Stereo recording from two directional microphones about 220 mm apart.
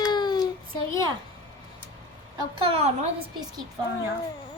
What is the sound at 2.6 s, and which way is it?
Speech, 25° right (ahead or behind).